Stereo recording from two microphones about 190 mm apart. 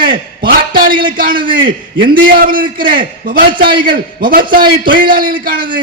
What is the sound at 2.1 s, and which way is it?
Speech, 45° right (ahead or behind).